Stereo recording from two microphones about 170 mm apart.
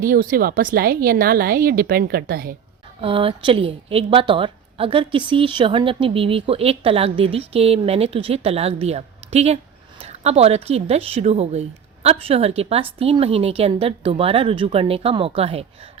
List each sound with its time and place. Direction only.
0.0 s a woman's voice: 55° right (ahead or behind)
3.0 s speech: 30° right (ahead or behind)